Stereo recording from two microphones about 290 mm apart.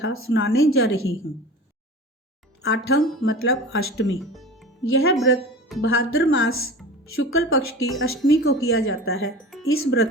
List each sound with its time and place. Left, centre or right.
0.0 s a woman's voice: left
2.6 s a woman's voice: left
4.2 s music: centre
4.9 s a woman's voice: left